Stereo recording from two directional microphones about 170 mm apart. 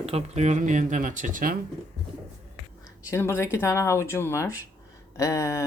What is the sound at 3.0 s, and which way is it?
Speech, 15° left (ahead or behind).